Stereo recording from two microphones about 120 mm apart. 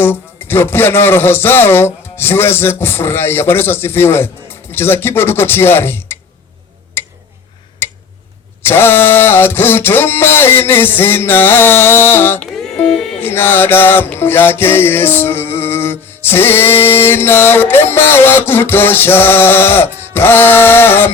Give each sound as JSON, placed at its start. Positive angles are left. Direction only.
{"t": 0.0, "sound": "music", "side_deg": 20}
{"t": 7.0, "sound": "tick-tock", "side_deg": 20}
{"t": 7.8, "sound": "tick", "side_deg": 20}
{"t": 8.6, "sound": "music", "side_deg": 20}
{"t": 12.5, "sound": "music", "side_deg": 5}
{"t": 13.2, "sound": "music", "side_deg": 20}